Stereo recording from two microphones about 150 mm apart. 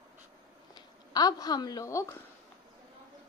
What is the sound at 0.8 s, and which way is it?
Speech, 25° left (ahead or behind).